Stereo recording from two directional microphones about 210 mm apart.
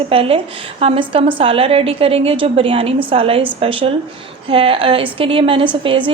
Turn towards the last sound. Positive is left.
turn(degrees=-25)  # may be behind; listen again after turning